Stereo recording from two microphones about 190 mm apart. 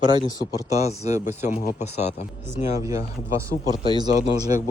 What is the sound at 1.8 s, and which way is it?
Speech, 35° left (ahead or behind).